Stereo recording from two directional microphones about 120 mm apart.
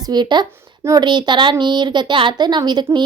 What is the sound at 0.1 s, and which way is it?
A woman's voice, 40° right (ahead or behind).